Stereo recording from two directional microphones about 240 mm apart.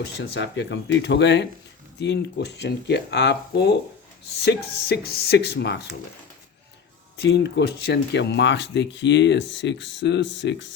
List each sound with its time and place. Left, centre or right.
0.2 s speech: left
7.2 s speech: left